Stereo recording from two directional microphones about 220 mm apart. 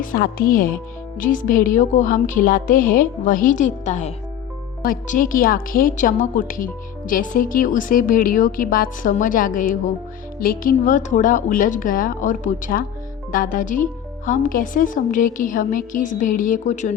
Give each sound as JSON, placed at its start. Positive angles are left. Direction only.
{"t": 0.0, "sound": "a woman's voice", "side_deg": 40}